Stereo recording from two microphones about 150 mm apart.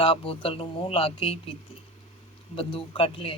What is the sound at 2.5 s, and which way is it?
Speech, 35° left (ahead or behind).